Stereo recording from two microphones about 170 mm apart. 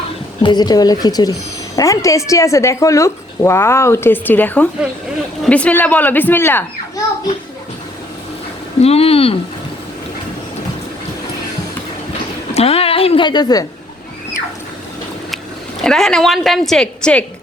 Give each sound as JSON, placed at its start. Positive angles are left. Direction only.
{"t": 0.4, "sound": "speech", "side_deg": 25}
{"t": 8.8, "sound": "speech", "side_deg": 35}
{"t": 12.5, "sound": "speech", "side_deg": 35}
{"t": 15.8, "sound": "a woman's voice", "side_deg": 5}